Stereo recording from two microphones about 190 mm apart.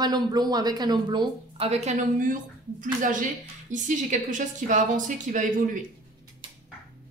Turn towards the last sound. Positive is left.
turn(degrees=-45)  # may be behind; listen again after turning